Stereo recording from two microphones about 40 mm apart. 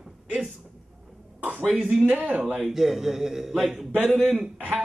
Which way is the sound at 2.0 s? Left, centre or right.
Right.